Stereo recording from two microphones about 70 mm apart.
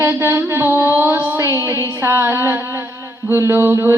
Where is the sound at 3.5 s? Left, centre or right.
Right.